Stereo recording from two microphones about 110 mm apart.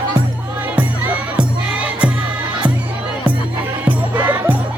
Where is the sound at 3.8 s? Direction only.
15° right (ahead or behind).